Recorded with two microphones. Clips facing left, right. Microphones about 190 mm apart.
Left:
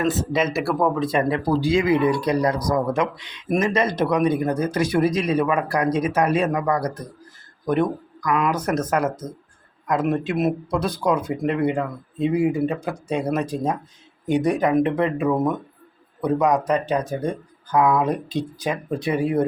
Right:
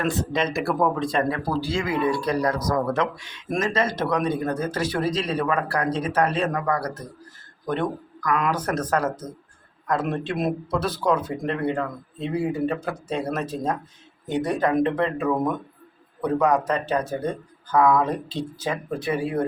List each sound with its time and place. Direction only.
0.1 s speech: 5° left (ahead or behind)
1.3 s speech: 15° left (ahead or behind)